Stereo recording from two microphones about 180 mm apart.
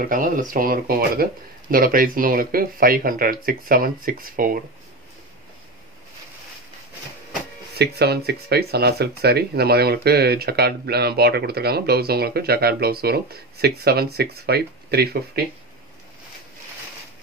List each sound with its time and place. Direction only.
0.0 s speech: 50° right (ahead or behind)
7.7 s speech: 65° right (ahead or behind)